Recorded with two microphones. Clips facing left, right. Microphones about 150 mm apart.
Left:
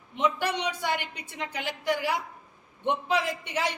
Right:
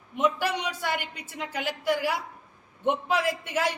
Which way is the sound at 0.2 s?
10° right (ahead or behind).